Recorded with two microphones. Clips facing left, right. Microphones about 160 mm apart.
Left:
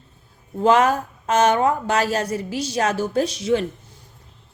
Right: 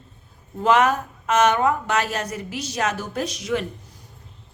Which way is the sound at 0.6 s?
30° left (ahead or behind).